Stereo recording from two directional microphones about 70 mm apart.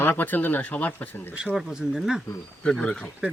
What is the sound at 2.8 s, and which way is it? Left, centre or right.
Speech, centre.